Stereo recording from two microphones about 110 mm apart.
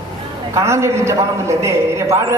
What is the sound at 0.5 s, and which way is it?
A man's voice, 25° right (ahead or behind).